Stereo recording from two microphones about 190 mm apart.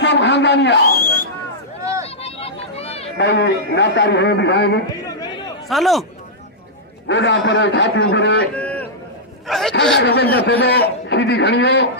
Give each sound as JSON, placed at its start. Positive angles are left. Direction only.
{"t": 0.0, "sound": "a sound", "side_deg": 65}
{"t": 2.0, "sound": "a sound", "side_deg": 30}
{"t": 3.2, "sound": "a man's voice", "side_deg": 65}
{"t": 4.9, "sound": "chatter", "side_deg": 20}
{"t": 5.6, "sound": "speech", "side_deg": 0}
{"t": 7.1, "sound": "a man's voice", "side_deg": 75}
{"t": 8.5, "sound": "a sound", "side_deg": 5}
{"t": 9.5, "sound": "speech", "side_deg": 0}
{"t": 9.9, "sound": "a man's voice", "side_deg": 60}